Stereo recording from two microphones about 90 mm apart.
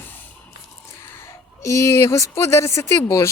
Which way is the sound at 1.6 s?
35° left (ahead or behind).